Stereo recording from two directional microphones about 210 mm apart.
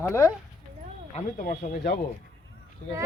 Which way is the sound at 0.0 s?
10° left (ahead or behind).